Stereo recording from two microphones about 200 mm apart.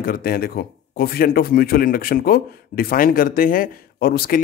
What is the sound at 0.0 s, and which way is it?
Speech, 45° left (ahead or behind).